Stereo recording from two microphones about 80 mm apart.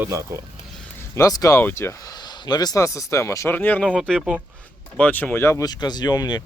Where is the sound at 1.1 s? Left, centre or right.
Left.